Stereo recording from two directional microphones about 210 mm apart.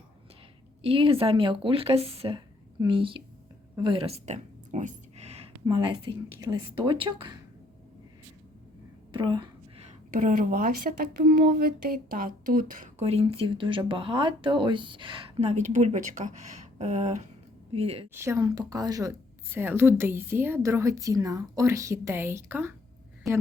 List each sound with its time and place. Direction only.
0.8 s speech: 25° right (ahead or behind)
9.1 s a woman's voice: 20° right (ahead or behind)
18.1 s a woman's voice: 10° right (ahead or behind)